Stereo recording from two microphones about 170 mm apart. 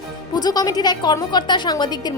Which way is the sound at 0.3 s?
25° left (ahead or behind).